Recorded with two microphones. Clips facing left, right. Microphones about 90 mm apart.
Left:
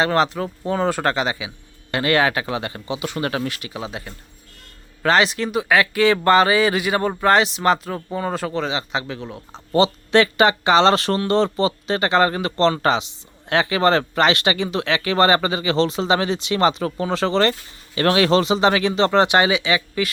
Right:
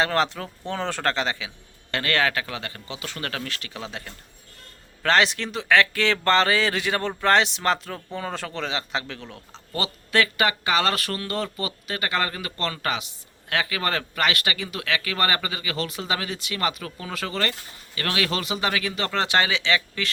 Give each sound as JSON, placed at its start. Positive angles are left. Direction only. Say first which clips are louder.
{"t": 0.0, "sound": "a man's voice", "louder": "left 4 dB", "side_deg": 5}
{"t": 9.7, "sound": "speech", "louder": "left 8 dB", "side_deg": 25}